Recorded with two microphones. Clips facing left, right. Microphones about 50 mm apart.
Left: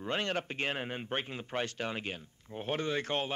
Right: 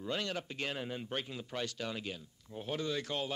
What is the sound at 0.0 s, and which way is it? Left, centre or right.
Speech, left.